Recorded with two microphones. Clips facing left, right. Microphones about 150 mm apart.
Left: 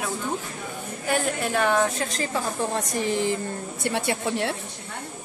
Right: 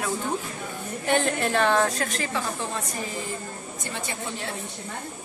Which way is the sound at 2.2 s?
40° left (ahead or behind).